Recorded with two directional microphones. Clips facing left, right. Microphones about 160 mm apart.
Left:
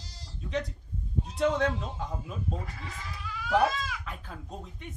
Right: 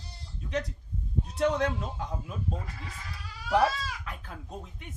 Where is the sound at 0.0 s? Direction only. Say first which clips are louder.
Right 1 dB; 90° left.